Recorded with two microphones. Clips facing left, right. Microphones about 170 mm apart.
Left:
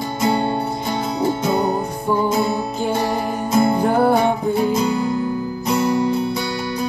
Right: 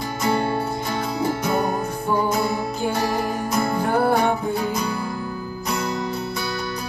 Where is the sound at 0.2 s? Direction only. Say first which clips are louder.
Left 3 dB; 20° left (ahead or behind).